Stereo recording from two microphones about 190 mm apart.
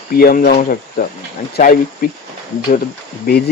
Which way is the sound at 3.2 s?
55° left (ahead or behind).